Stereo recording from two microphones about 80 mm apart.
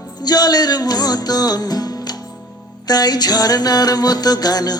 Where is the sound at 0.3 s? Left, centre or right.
Left.